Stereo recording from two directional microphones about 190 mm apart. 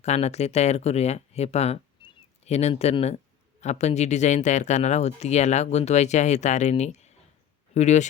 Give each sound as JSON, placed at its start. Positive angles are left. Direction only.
{"t": 0.0, "sound": "speech", "side_deg": 35}